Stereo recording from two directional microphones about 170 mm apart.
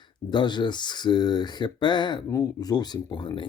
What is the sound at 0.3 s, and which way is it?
Speech, 25° left (ahead or behind).